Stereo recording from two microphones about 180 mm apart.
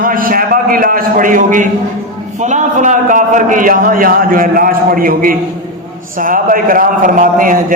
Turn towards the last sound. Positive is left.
turn(degrees=-50)  # may be behind; listen again after turning